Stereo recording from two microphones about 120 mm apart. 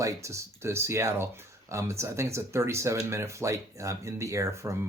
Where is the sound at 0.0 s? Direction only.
25° right (ahead or behind).